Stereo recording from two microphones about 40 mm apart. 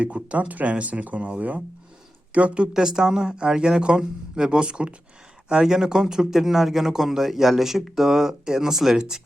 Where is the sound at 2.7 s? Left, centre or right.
Centre.